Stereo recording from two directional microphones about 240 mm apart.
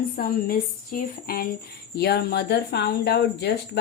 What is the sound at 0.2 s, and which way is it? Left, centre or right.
Speech, left.